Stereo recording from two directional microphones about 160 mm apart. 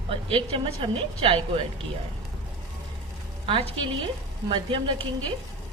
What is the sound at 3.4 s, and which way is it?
A woman's voice, 35° right (ahead or behind).